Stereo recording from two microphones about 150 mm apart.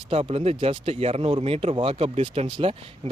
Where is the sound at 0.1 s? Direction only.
40° right (ahead or behind).